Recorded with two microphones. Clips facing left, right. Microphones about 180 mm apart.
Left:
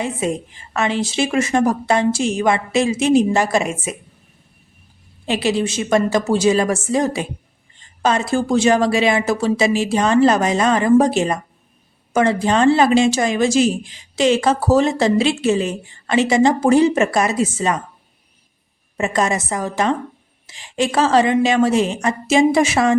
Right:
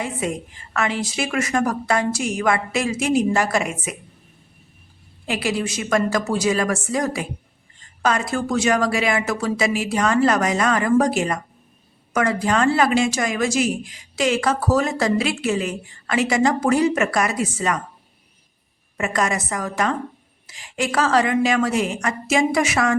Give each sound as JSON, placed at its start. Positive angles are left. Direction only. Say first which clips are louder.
{"t": 0.0, "sound": "speech", "louder": "left 4 dB", "side_deg": 25}
{"t": 5.2, "sound": "speech", "louder": "left 5 dB", "side_deg": 25}
{"t": 18.9, "sound": "speech", "louder": "left 3 dB", "side_deg": 25}